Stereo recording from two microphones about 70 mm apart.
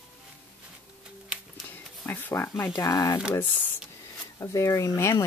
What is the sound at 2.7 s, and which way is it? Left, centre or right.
Speech, left.